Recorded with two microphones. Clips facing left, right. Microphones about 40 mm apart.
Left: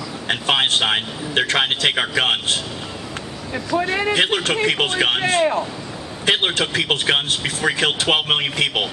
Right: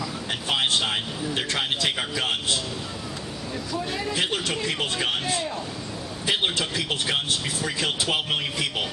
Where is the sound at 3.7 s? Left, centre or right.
Left.